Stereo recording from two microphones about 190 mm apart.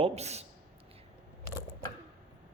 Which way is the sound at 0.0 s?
35° right (ahead or behind).